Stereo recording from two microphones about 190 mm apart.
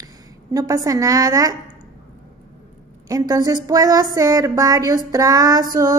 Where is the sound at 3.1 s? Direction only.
20° right (ahead or behind).